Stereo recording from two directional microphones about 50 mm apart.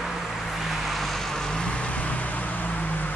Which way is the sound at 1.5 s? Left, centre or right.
Left.